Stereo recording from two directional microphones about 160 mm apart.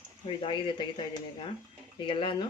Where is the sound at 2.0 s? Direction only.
30° left (ahead or behind).